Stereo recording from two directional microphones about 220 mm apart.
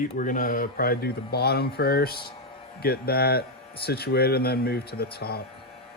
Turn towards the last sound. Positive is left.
turn(degrees=45)  # may be behind; listen again after turning